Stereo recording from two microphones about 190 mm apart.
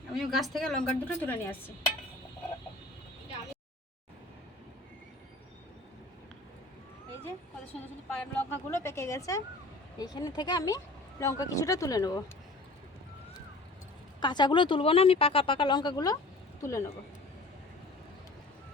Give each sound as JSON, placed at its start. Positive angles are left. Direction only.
{"t": 0.1, "sound": "a woman's voice", "side_deg": 0}
{"t": 8.2, "sound": "speech", "side_deg": 10}
{"t": 14.2, "sound": "speech", "side_deg": 25}